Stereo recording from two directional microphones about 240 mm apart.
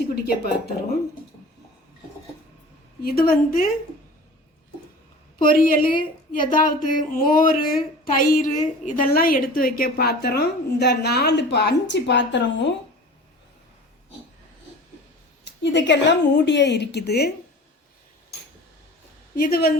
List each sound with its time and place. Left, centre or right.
0.3 s speech: left
3.0 s speech: left
5.4 s a woman's voice: left
15.6 s a woman's voice: left
19.4 s speech: left